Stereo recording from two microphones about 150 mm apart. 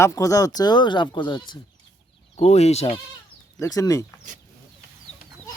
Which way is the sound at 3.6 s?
20° left (ahead or behind).